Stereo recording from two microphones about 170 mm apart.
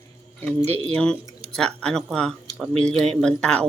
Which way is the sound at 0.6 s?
35° right (ahead or behind).